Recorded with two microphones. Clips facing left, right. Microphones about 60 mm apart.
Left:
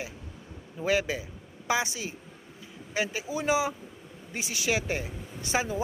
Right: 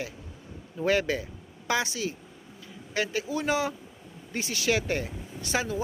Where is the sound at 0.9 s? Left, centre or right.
Centre.